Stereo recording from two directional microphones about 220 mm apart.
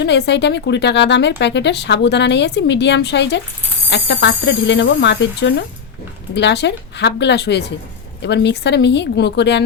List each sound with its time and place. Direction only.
0.0 s speech: 50° left (ahead or behind)